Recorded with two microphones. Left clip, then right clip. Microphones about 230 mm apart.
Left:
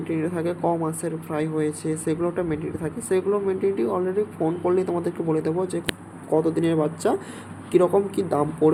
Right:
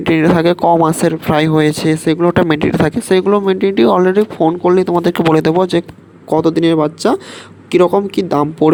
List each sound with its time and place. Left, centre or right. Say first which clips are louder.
0.0 s speech: right 15 dB; right